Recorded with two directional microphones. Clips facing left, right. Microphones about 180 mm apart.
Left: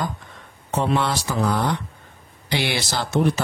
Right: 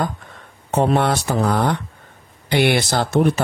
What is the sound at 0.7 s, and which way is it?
Speech, 55° right (ahead or behind).